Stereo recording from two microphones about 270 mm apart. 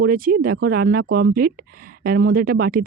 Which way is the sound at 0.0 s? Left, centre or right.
Right.